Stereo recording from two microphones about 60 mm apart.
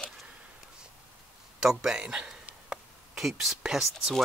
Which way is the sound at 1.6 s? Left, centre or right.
Centre.